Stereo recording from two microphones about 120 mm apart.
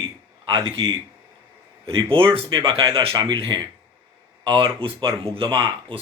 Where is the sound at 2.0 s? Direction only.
45° right (ahead or behind).